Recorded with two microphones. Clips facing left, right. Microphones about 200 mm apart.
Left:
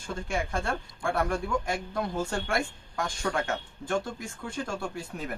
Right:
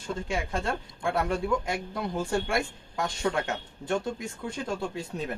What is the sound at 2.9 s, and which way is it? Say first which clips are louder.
Speech: right 2 dB; 20° right (ahead or behind).